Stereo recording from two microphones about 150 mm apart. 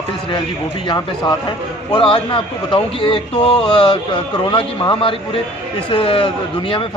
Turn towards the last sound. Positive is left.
turn(degrees=35)  # may be behind; listen again after turning